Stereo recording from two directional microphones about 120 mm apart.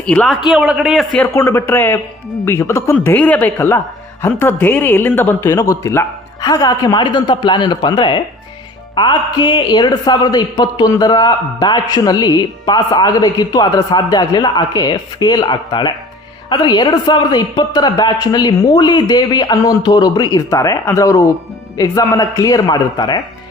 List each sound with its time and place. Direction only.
0.0 s speech: 10° left (ahead or behind)
0.5 s a man's voice: 5° right (ahead or behind)
1.4 s a man's voice: 20° left (ahead or behind)